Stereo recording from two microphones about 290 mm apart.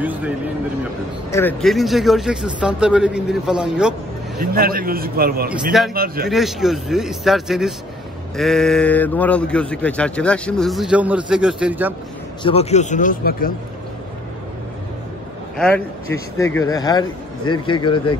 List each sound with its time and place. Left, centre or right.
0.0 s speech: centre
1.3 s speech: centre
4.4 s a man's voice: right
5.5 s speech: centre
5.9 s a man's voice: right
6.2 s speech: centre
12.4 s a man's voice: left
15.5 s speech: centre